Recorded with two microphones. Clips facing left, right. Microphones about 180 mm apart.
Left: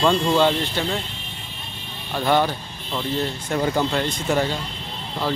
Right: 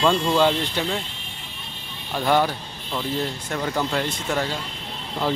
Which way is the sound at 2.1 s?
5° right (ahead or behind).